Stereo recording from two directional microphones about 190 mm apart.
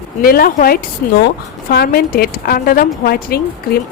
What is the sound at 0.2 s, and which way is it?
Speech, 50° left (ahead or behind).